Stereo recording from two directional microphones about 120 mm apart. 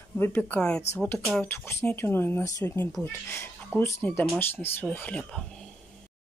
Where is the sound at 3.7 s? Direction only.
20° left (ahead or behind).